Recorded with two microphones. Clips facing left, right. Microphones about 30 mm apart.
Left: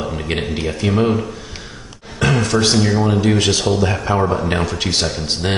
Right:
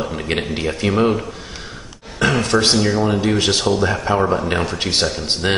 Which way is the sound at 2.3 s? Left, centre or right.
Right.